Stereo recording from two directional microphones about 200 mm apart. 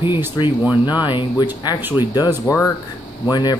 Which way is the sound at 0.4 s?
20° left (ahead or behind).